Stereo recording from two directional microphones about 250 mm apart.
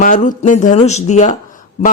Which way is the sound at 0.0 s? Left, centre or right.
Left.